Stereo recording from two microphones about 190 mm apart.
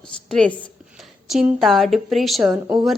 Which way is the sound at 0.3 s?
5° left (ahead or behind).